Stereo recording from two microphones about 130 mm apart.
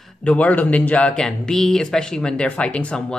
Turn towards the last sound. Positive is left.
turn(degrees=10)  # may be behind; listen again after turning